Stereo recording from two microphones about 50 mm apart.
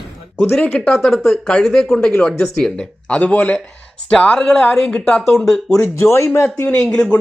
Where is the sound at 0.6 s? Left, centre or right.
Left.